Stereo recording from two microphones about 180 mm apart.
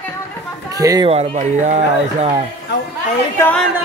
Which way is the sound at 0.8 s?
20° right (ahead or behind).